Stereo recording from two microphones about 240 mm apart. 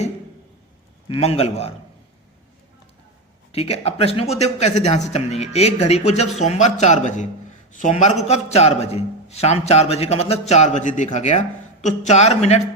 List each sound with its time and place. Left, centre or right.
1.0 s a man's voice: left
3.5 s a man's voice: left